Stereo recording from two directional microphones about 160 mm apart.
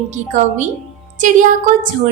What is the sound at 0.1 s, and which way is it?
A woman's voice, 45° right (ahead or behind).